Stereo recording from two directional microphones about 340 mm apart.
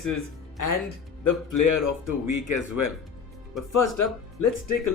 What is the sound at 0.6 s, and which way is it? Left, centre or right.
Speech, left.